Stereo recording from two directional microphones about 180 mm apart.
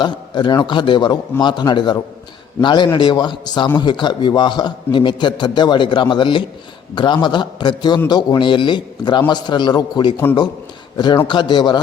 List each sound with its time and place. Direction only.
0.0 s a man's voice: 25° left (ahead or behind)